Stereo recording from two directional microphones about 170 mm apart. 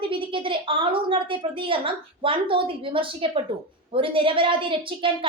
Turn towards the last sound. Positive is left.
turn(degrees=-30)  # may be behind; listen again after turning